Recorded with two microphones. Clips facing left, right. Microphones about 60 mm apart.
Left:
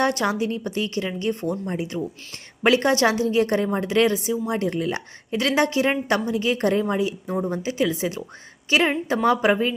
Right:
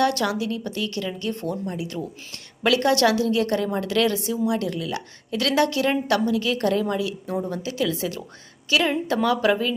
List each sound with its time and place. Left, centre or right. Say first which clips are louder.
0.0 s speech: even; left
4.4 s speech: even; left